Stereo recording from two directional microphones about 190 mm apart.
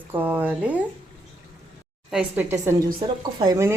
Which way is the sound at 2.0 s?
5° right (ahead or behind).